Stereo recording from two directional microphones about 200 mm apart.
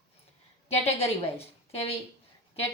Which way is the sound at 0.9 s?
30° left (ahead or behind).